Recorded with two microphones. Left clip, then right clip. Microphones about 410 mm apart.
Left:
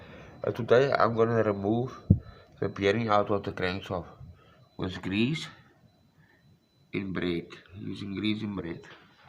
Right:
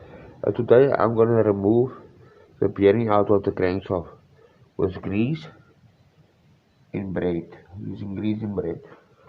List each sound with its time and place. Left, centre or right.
0.4 s speech: right
6.9 s speech: right